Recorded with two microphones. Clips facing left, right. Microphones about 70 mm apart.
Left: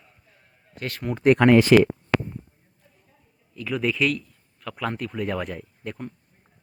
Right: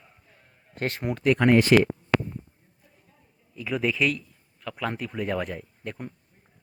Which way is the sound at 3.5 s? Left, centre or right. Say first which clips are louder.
Left 1 dB; centre.